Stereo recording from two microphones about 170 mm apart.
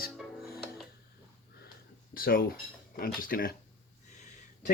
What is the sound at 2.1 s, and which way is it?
Speech, 60° left (ahead or behind).